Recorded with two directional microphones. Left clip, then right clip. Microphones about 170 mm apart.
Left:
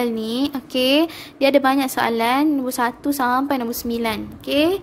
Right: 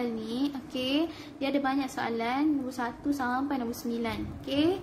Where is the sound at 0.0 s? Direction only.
60° left (ahead or behind).